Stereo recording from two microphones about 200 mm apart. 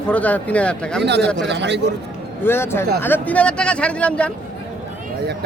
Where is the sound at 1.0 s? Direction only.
60° right (ahead or behind).